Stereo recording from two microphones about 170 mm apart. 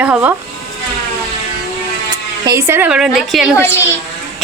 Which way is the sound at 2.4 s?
15° right (ahead or behind).